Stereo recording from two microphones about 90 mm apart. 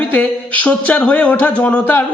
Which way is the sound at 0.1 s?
15° left (ahead or behind).